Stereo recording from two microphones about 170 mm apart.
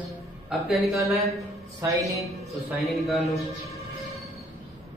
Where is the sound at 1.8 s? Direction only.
20° right (ahead or behind).